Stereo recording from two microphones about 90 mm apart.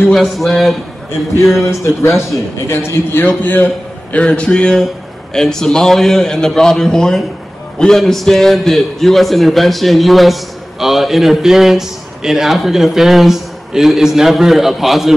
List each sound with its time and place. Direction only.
0.1 s a man's voice: centre (ahead or behind)
1.7 s a man's voice: 30° left (ahead or behind); by 15.1 s 5° right (ahead or behind)